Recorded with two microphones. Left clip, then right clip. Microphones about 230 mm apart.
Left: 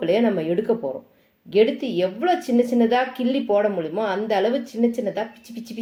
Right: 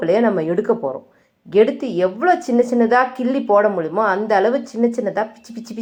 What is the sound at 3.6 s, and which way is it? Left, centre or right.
Speech, centre.